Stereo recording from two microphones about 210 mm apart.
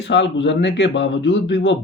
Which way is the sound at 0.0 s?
55° left (ahead or behind).